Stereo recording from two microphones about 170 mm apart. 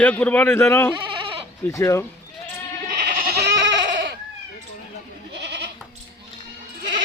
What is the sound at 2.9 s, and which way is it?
Goat, 60° right (ahead or behind).